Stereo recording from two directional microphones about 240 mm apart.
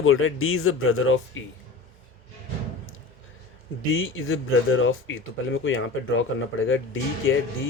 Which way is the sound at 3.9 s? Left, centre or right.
Left.